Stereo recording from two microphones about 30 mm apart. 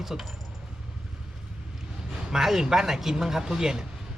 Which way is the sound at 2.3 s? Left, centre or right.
Centre.